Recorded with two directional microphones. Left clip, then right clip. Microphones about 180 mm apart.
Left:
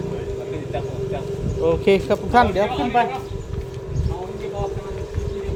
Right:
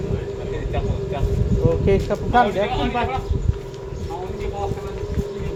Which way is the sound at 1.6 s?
45° left (ahead or behind).